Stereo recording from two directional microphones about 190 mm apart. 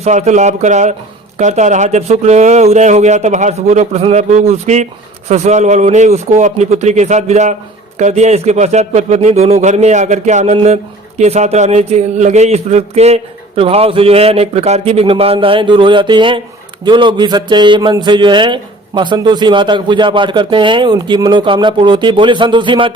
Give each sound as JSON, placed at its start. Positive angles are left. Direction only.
{"t": 0.0, "sound": "a man's voice", "side_deg": -35}